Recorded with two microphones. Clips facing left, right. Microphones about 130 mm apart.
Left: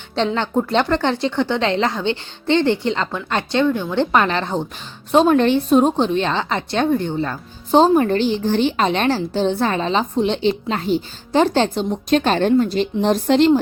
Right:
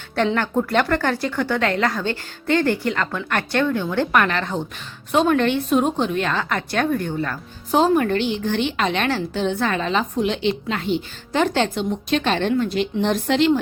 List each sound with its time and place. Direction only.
0.3 s a woman's voice: 20° left (ahead or behind); by 13.6 s 35° left (ahead or behind)